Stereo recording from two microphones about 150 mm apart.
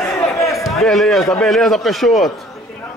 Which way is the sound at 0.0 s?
15° left (ahead or behind).